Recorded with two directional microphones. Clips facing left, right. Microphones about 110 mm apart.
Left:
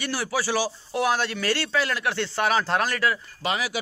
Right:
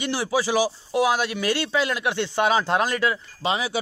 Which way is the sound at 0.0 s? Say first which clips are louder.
Right 3 dB; 20° right (ahead or behind).